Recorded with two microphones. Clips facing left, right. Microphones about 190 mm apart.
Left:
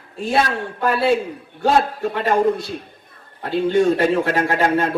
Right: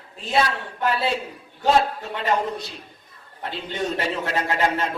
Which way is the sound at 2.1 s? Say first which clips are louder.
Left 4 dB; 50° left (ahead or behind).